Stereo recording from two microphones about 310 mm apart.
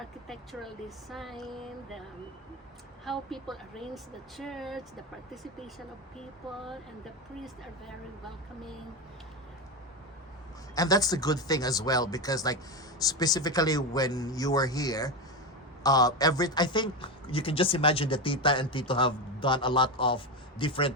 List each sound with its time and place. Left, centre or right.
0.3 s speech: centre
7.4 s speech: centre
10.8 s a woman's voice: centre